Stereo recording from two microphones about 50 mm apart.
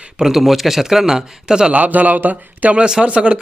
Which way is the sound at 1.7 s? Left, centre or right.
Right.